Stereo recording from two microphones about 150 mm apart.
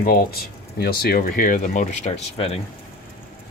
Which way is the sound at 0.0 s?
80° left.